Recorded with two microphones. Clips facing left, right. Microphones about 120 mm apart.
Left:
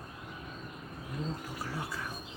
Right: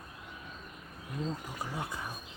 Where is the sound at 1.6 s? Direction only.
20° right (ahead or behind).